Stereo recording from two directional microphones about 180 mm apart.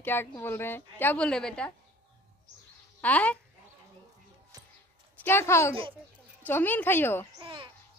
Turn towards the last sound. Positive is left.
turn(degrees=-30)  # may be behind; listen again after turning